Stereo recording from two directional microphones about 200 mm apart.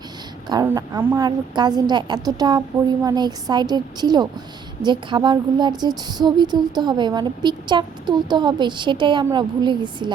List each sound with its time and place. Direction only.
0.4 s speech: 20° right (ahead or behind)